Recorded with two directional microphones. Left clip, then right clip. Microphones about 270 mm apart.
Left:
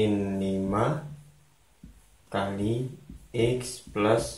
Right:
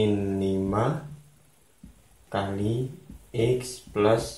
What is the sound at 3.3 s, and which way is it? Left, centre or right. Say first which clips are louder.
Speech: right 1 dB; centre.